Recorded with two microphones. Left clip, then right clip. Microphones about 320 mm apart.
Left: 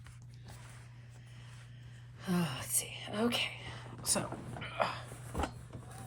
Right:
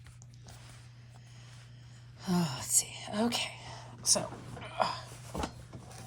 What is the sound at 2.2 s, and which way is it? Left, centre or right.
Whispering, centre.